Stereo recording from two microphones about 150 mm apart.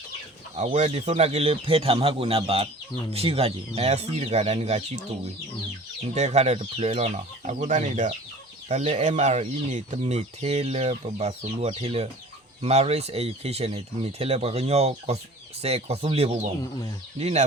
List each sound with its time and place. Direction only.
0.5 s speech: 50° right (ahead or behind)
6.1 s speech: 45° right (ahead or behind)